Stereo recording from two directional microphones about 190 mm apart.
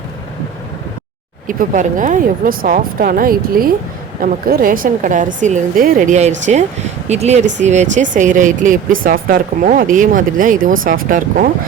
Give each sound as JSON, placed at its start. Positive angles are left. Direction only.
{"t": 1.5, "sound": "speech", "side_deg": -45}